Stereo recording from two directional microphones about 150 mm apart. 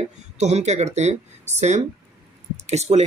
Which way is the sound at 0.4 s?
50° right (ahead or behind).